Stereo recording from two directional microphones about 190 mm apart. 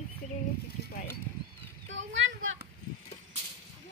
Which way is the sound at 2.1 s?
85° right.